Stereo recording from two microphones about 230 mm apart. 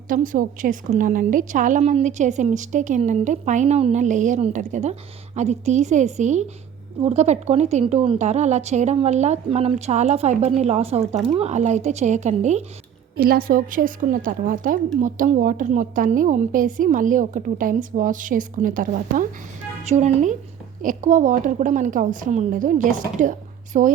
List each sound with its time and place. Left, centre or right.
0.1 s a woman's voice: right
13.1 s a woman's voice: right